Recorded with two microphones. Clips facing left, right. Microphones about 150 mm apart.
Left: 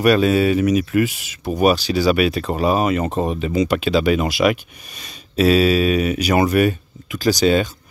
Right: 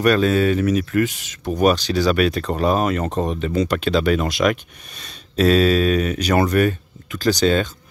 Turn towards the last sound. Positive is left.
turn(degrees=10)  # may be behind; listen again after turning